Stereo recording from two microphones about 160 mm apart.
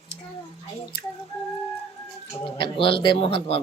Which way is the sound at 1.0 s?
90° left.